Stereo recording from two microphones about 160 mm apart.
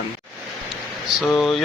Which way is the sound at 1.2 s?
Centre (ahead or behind).